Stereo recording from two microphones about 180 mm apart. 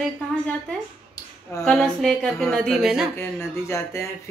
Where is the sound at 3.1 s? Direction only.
15° left (ahead or behind).